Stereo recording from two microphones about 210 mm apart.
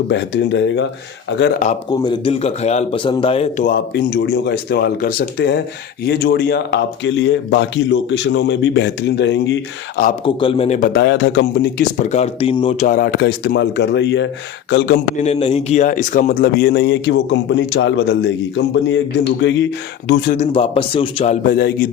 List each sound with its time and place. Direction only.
0.1 s speech: 55° left (ahead or behind)
1.9 s a man's voice: 20° left (ahead or behind)
3.7 s speech: 45° left (ahead or behind)
10.1 s a man's voice: 25° left (ahead or behind)
10.8 s speech: 50° left (ahead or behind)
11.8 s speech: 35° left (ahead or behind); by 14.9 s 55° left (ahead or behind)
15.2 s speech: 30° left (ahead or behind); by 19.6 s 60° left (ahead or behind)
20.3 s a man's voice: 30° left (ahead or behind)
21.4 s speech: 45° left (ahead or behind)